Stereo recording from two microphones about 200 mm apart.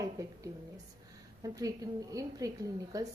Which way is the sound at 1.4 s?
15° right (ahead or behind).